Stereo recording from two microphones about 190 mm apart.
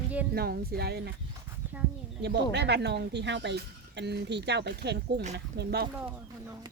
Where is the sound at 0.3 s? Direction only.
55° right (ahead or behind).